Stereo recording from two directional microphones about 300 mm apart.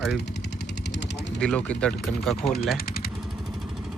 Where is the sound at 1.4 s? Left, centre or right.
Centre.